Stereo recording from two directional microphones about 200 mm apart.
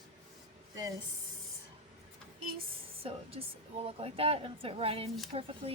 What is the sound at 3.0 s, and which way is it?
A woman's voice, 30° right (ahead or behind).